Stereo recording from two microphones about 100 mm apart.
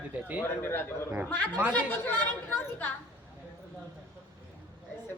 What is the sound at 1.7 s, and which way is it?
Speech, 20° left (ahead or behind).